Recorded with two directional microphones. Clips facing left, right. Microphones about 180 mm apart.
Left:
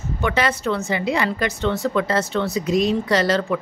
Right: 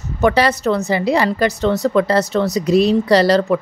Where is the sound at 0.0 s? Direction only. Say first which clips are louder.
Right 6 dB; 40° right (ahead or behind).